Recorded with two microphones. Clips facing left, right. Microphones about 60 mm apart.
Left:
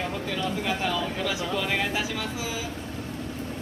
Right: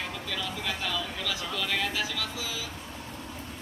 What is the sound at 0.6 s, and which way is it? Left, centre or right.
Speech, left.